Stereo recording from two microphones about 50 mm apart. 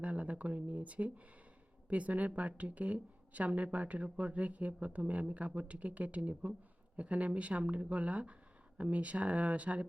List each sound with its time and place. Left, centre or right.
0.0 s a woman's voice: right